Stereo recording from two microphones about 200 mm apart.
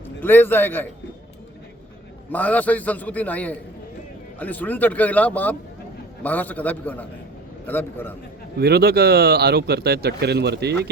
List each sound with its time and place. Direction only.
0.2 s a man's voice: 10° left (ahead or behind)
2.3 s a man's voice: 10° left (ahead or behind)
8.5 s speech: 50° right (ahead or behind)